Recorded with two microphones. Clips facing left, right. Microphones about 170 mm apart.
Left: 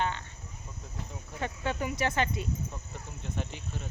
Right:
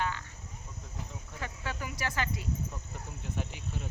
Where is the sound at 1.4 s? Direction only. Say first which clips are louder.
Left 7 dB; 25° left (ahead or behind).